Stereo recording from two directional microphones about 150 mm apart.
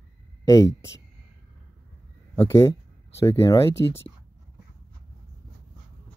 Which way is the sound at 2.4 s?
20° left (ahead or behind).